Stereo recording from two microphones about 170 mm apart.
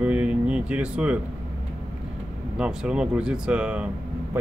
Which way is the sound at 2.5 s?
5° right (ahead or behind).